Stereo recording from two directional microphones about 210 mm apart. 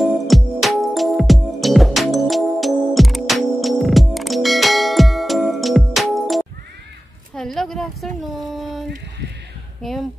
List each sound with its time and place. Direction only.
0.0 s music: centre (ahead or behind)
7.3 s a sound: centre (ahead or behind)
9.8 s speech: centre (ahead or behind)